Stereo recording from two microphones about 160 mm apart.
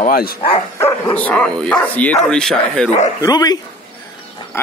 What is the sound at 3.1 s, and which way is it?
Speech, 20° left (ahead or behind).